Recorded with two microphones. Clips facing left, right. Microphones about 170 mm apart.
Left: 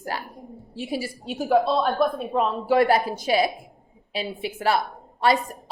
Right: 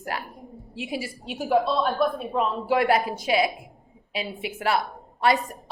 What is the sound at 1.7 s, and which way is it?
Speech, 50° left (ahead or behind).